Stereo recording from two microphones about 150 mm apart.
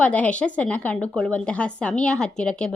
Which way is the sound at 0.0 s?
10° left (ahead or behind).